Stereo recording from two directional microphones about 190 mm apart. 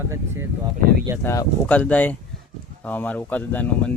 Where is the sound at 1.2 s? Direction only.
10° left (ahead or behind).